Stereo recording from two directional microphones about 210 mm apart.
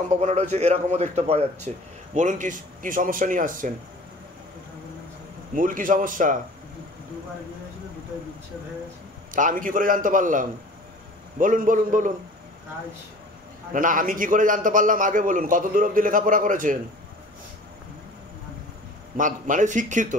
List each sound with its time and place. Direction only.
0.1 s a man's voice: 35° right (ahead or behind)
5.6 s a man's voice: 40° right (ahead or behind)
9.3 s a man's voice: 40° right (ahead or behind)
13.7 s a man's voice: 40° right (ahead or behind)
19.1 s a man's voice: 40° right (ahead or behind)